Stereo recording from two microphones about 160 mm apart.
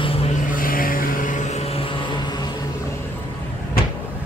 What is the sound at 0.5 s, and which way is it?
Vehicle, 60° left (ahead or behind).